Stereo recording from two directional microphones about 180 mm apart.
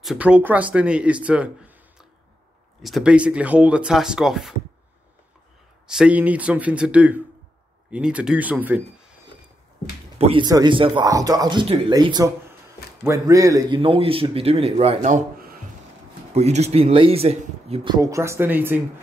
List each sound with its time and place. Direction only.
0.0 s speech: 5° right (ahead or behind)
5.9 s speech: 5° right (ahead or behind)
10.1 s speech: 35° right (ahead or behind)
10.4 s speech: 25° right (ahead or behind)
13.7 s speech: 30° right (ahead or behind); by 15.6 s 55° right (ahead or behind)
16.3 s speech: 35° right (ahead or behind)
17.9 s speech: 15° right (ahead or behind)